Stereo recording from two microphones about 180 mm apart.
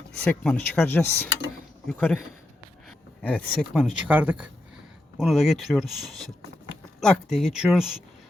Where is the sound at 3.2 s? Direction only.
5° left (ahead or behind).